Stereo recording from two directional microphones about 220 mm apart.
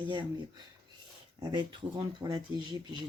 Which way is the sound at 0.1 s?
20° right (ahead or behind).